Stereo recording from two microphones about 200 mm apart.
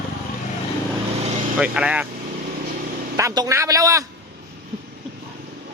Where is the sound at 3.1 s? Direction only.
20° right (ahead or behind).